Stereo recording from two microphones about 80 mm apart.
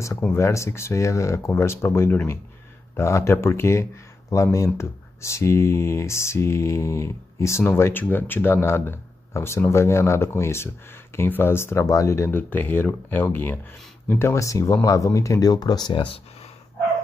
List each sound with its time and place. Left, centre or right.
0.3 s speech: left